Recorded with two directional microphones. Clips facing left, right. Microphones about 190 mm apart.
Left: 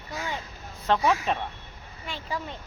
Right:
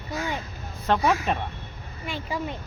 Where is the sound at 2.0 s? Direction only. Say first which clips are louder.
Right 4 dB; 15° right (ahead or behind).